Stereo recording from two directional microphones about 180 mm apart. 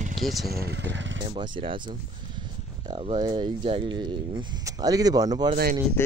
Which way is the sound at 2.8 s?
30° right (ahead or behind).